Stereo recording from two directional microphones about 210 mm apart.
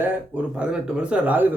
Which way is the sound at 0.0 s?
10° right (ahead or behind).